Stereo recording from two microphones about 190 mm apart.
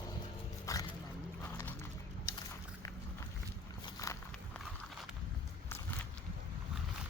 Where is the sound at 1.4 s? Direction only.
10° left (ahead or behind).